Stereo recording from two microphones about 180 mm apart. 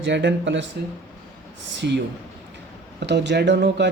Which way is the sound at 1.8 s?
65° right (ahead or behind).